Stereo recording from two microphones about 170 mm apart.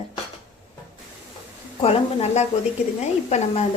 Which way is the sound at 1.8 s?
35° left (ahead or behind).